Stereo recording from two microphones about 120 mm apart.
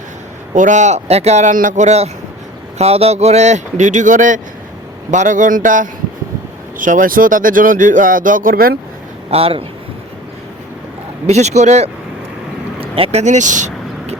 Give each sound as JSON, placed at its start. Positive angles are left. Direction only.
{"t": 0.5, "sound": "speech", "side_deg": -90}
{"t": 2.7, "sound": "speech", "side_deg": -60}
{"t": 9.3, "sound": "a man's voice", "side_deg": -50}
{"t": 11.3, "sound": "speech", "side_deg": -70}
{"t": 12.8, "sound": "vehicle", "side_deg": -55}